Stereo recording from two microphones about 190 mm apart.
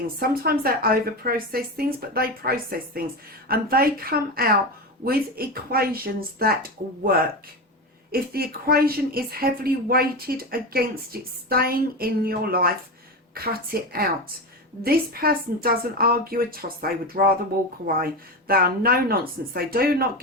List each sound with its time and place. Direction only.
0.2 s a woman's voice: 50° right (ahead or behind)